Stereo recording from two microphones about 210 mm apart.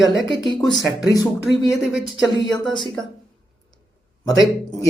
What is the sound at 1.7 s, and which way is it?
Speech, centre (ahead or behind).